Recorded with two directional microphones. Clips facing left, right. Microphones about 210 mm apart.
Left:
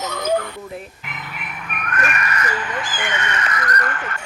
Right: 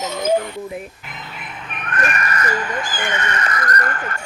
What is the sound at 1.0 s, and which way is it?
Speech, 25° right (ahead or behind).